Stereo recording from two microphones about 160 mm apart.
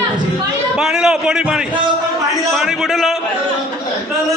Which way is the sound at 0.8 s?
5° right (ahead or behind).